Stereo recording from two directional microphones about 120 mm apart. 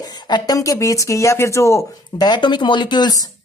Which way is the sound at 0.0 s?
35° left (ahead or behind).